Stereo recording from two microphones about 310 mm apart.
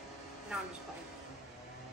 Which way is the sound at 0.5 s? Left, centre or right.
Centre.